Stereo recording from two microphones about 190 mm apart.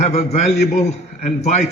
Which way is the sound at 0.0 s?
35° left (ahead or behind).